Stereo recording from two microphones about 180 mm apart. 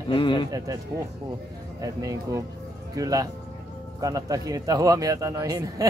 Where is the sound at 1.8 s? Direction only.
20° right (ahead or behind).